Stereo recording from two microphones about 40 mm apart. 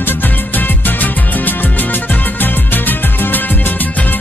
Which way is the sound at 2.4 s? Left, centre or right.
Left.